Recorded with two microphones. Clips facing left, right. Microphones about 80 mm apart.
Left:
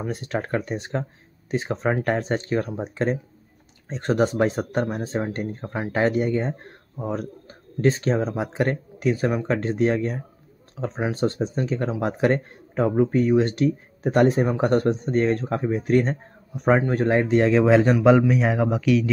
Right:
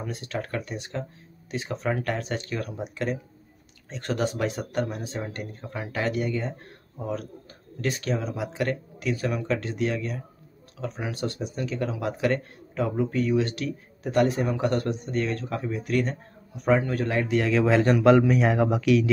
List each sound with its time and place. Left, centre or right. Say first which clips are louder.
0.0 s speech: left 5 dB; left
17.9 s speech: left 1 dB; centre